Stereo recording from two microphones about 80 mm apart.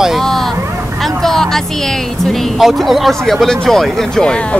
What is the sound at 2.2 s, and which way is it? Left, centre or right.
Speech, centre.